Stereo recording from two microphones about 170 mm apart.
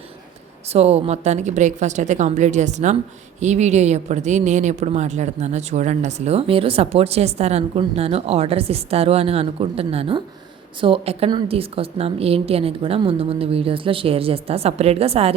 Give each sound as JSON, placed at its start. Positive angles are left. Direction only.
{"t": 0.7, "sound": "a woman's voice", "side_deg": -40}